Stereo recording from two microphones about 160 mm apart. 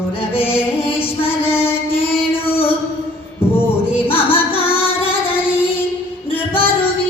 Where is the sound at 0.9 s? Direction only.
35° left (ahead or behind).